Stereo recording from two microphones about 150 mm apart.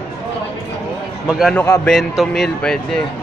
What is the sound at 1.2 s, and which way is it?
Speech, 5° right (ahead or behind).